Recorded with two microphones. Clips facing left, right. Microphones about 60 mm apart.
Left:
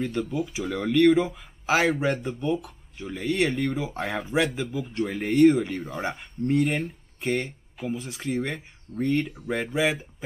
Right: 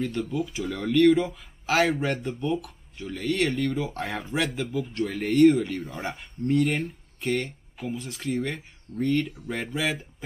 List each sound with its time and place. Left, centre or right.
0.0 s speech: centre
3.0 s speech: centre